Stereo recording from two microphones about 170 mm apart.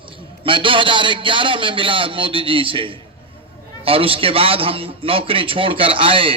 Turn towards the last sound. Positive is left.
turn(degrees=-30)  # may be behind; listen again after turning